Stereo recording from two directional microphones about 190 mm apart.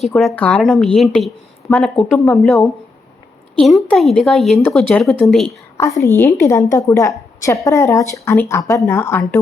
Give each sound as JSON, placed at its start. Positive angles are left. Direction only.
{"t": 0.0, "sound": "speech", "side_deg": 0}
{"t": 5.7, "sound": "a woman's voice", "side_deg": 15}